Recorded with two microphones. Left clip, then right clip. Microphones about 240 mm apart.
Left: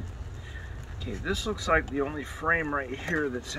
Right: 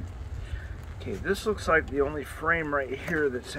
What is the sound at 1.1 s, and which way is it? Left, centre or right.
Speech, right.